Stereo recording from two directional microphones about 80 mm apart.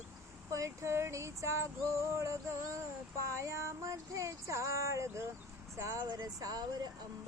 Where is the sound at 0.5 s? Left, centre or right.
Right.